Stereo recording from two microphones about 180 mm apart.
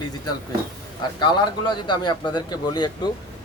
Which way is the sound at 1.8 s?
25° left (ahead or behind).